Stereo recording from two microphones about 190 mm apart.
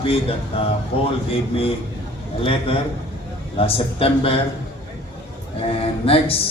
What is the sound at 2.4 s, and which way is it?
A man's voice, 30° left (ahead or behind).